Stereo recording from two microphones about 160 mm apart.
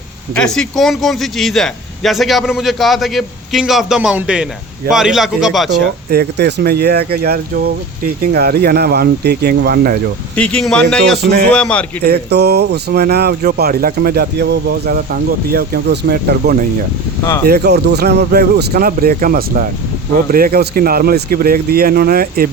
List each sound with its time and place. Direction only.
0.3 s speech: 5° left (ahead or behind)
6.1 s speech: 85° right
10.3 s speech: 5° left (ahead or behind)
11.2 s speech: 75° right (ahead or behind)
11.5 s a man's voice: 5° left (ahead or behind)
12.0 s speech: 85° right; by 22.4 s 65° right (ahead or behind)